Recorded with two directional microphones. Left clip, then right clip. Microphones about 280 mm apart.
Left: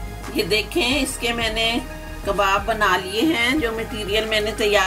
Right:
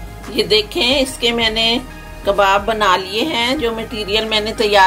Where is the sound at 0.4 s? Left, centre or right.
Right.